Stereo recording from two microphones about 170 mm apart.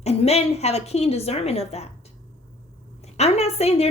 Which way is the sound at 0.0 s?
40° left (ahead or behind).